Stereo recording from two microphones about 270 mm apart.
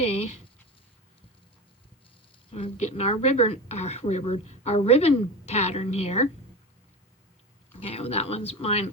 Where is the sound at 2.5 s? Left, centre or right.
Left.